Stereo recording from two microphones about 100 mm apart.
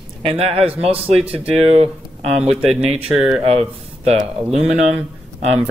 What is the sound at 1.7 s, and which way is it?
Speech, 90° right.